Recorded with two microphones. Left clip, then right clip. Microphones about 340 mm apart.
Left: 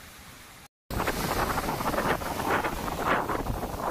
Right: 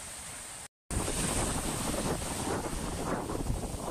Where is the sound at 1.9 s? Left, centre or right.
Left.